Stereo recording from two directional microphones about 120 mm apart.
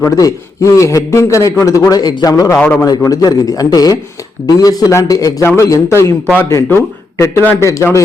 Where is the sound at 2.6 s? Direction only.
15° left (ahead or behind).